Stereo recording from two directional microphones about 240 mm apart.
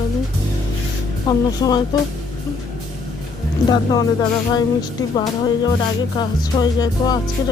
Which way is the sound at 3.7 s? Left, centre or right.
Centre.